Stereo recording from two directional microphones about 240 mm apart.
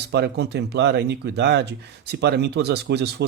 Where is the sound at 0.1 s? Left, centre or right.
Right.